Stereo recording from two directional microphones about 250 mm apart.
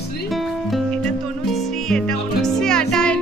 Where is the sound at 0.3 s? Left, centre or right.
Centre.